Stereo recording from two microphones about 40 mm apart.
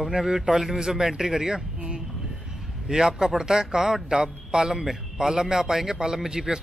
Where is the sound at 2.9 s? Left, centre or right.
Centre.